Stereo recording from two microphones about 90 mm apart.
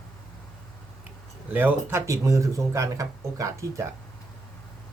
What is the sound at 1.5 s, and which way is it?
Speech, 20° right (ahead or behind).